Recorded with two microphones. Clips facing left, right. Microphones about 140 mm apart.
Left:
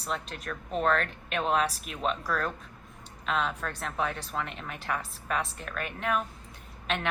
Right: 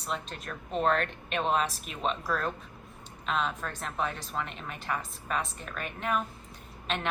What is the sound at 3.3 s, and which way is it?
A woman's voice, centre (ahead or behind).